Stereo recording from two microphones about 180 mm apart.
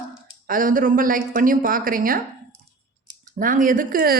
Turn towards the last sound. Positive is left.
turn(degrees=-55)  # may be behind; listen again after turning